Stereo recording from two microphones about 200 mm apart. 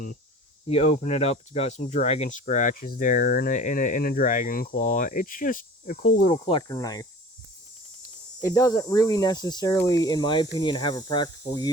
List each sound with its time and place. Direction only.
0.7 s speech: 35° left (ahead or behind)
6.5 s cricket: 20° left (ahead or behind)
8.4 s cricket: 15° left (ahead or behind)
9.7 s speech: 20° left (ahead or behind)